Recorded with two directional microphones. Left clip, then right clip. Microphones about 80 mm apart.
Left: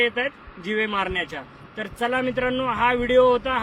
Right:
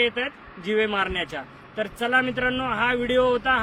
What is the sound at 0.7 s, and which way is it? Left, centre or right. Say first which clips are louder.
Speech: right 1 dB; right.